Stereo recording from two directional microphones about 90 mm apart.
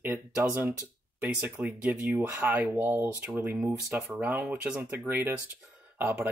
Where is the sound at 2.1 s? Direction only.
20° right (ahead or behind).